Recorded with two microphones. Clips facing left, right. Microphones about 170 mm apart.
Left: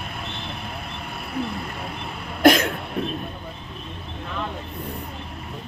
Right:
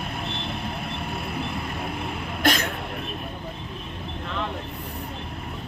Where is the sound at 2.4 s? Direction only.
50° left (ahead or behind).